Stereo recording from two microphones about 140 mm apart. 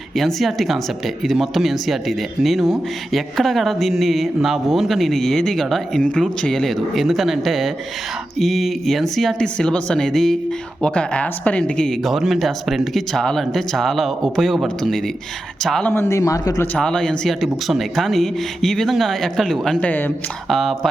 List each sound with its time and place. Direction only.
0.1 s speech: centre (ahead or behind)
15.9 s a man's voice: 15° left (ahead or behind)
16.7 s speech: 5° left (ahead or behind)
20.5 s speech: centre (ahead or behind)